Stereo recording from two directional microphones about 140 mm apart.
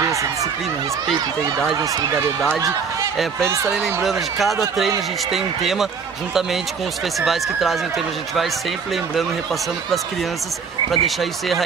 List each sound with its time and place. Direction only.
0.0 s a sound: 20° right (ahead or behind)
1.8 s speech: 25° right (ahead or behind)
3.4 s speech: 20° right (ahead or behind)
3.8 s speech: centre (ahead or behind)
7.2 s speech: centre (ahead or behind)
10.9 s speech: centre (ahead or behind)